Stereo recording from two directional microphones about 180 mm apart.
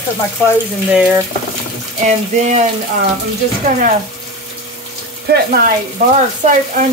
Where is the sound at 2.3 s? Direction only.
40° right (ahead or behind).